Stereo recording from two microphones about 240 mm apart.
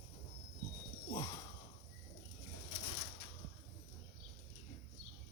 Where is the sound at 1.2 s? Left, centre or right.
Centre.